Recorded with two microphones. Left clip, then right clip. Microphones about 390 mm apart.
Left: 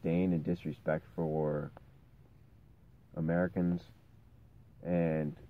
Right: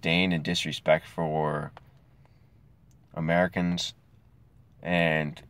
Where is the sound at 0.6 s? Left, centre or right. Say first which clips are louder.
Right 11 dB; centre.